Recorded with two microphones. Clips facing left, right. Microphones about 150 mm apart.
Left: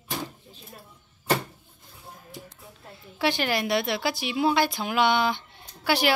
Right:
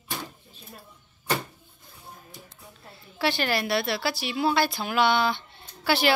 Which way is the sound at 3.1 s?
15° left (ahead or behind).